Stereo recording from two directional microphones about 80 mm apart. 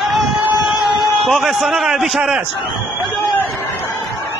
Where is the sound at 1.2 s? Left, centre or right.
Centre.